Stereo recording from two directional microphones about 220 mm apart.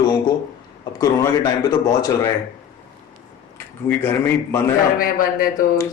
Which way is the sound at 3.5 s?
10° left (ahead or behind).